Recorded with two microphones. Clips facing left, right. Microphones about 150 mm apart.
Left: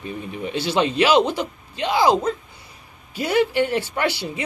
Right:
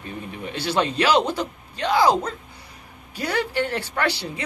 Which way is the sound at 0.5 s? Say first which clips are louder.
Left 3 dB; 15° left (ahead or behind).